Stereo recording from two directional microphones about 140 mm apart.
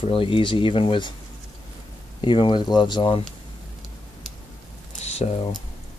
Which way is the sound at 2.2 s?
35° left (ahead or behind).